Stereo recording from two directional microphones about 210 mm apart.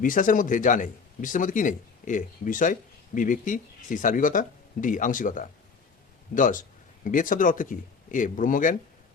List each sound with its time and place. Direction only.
0.0 s speech: 40° left (ahead or behind)